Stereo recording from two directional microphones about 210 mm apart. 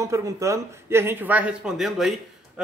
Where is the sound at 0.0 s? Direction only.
15° right (ahead or behind).